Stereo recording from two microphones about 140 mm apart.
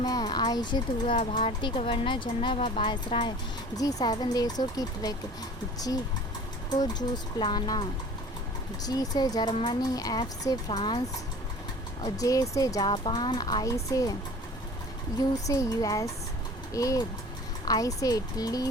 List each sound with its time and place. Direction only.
0.0 s speech: 30° left (ahead or behind); by 1.5 s 50° left (ahead or behind)
1.6 s a child's voice: 40° left (ahead or behind)
7.3 s a child's voice: 30° left (ahead or behind)
12.0 s a child's voice: 25° left (ahead or behind)
15.2 s a child's voice: 25° left (ahead or behind)